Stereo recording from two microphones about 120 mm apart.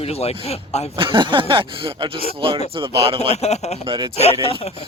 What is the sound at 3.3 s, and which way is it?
Speech, 65° left (ahead or behind).